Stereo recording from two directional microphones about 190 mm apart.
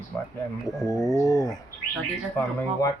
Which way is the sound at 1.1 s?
20° left (ahead or behind).